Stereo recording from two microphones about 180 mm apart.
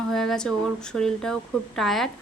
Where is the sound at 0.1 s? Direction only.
Centre (ahead or behind).